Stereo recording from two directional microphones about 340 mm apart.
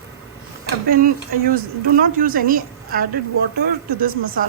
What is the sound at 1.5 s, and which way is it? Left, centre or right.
A woman's voice, right.